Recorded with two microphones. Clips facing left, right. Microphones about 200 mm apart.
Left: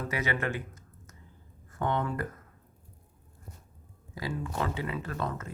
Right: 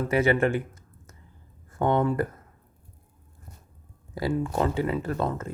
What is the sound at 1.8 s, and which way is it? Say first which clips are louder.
Speech: right 7 dB; 50° right (ahead or behind).